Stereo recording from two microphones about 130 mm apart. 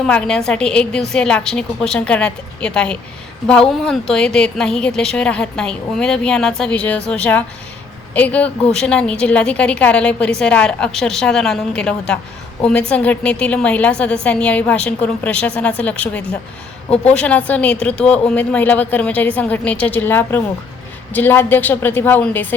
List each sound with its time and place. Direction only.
0.0 s a woman's voice: 5° left (ahead or behind)